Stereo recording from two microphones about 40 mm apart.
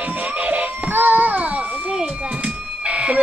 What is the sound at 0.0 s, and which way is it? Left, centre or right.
Music, right.